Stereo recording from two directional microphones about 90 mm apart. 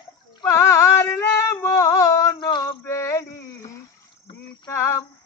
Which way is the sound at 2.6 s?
35° left (ahead or behind).